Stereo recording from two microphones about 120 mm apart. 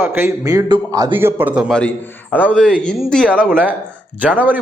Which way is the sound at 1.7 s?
10° left (ahead or behind).